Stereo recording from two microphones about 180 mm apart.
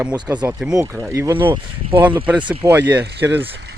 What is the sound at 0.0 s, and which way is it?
Speech, 15° right (ahead or behind).